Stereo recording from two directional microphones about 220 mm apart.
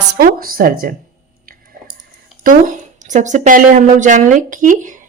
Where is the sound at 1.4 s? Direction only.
40° right (ahead or behind).